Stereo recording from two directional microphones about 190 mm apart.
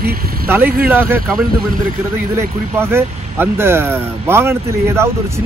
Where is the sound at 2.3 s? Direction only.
10° right (ahead or behind).